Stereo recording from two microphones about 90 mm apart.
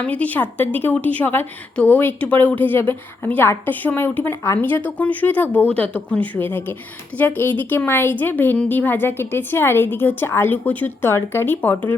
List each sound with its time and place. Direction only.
0.0 s a woman's voice: 15° left (ahead or behind)